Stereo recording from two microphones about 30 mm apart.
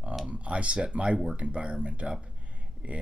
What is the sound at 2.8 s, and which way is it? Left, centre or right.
Speech, right.